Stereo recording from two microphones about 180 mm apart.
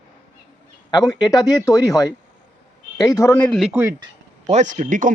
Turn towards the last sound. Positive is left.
turn(degrees=-45)  # may be behind; listen again after turning